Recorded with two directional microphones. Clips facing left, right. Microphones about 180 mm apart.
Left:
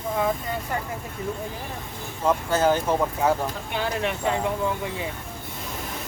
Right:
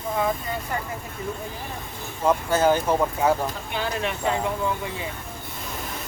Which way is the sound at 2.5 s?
10° right (ahead or behind).